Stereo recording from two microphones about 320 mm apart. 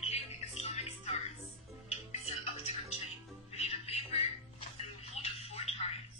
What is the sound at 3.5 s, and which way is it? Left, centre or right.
Music, centre.